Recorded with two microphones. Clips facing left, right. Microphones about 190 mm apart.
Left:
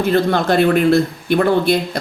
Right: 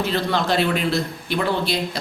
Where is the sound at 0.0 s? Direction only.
50° left (ahead or behind).